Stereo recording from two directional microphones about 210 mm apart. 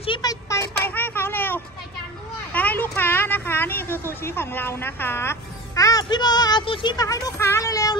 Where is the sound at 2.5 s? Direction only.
10° left (ahead or behind).